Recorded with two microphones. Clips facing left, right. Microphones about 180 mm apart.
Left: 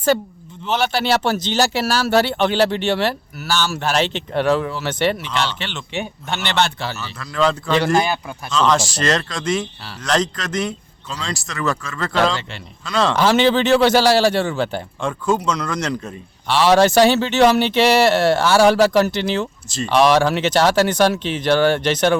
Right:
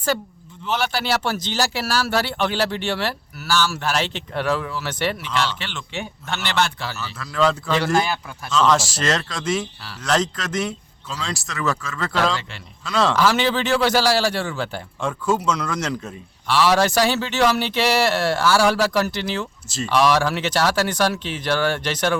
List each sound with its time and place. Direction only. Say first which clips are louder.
0.1 s speech: left 6 dB; 25° left (ahead or behind)
7.2 s speech: left 1 dB; centre (ahead or behind)
7.9 s a man's voice: left 3 dB; 15° left (ahead or behind)
8.5 s speech: left 1 dB; 5° right (ahead or behind)
13.1 s speech: left 4 dB; 25° left (ahead or behind)
15.0 s speech: left 1 dB; 5° right (ahead or behind)
16.5 s speech: left 4 dB; 25° left (ahead or behind)
19.6 s speech: left 2 dB; 5° right (ahead or behind)
19.9 s speech: left 4 dB; 25° left (ahead or behind)